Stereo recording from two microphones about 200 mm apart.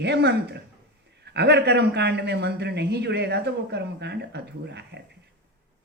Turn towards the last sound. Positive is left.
turn(degrees=-60)  # may be behind; listen again after turning